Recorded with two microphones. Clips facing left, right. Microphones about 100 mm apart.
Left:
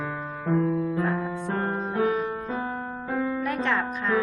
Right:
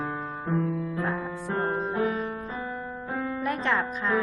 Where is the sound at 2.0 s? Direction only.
65° left (ahead or behind).